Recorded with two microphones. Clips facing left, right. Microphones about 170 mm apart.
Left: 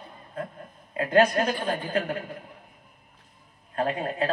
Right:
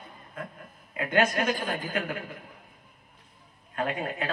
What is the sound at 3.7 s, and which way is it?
Speech, 35° left (ahead or behind).